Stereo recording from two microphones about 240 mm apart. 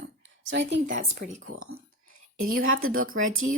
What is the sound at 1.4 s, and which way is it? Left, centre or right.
Speech, right.